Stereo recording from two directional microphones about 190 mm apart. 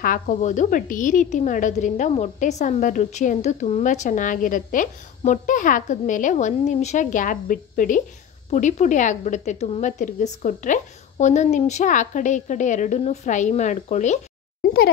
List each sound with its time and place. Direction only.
0.0 s a woman's voice: 45° left (ahead or behind)